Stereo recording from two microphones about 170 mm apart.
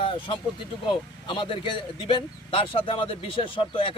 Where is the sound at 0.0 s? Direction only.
30° left (ahead or behind).